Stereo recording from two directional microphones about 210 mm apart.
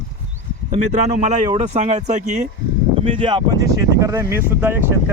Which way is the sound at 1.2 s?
35° right (ahead or behind).